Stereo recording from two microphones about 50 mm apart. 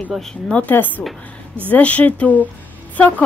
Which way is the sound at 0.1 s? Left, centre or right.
Centre.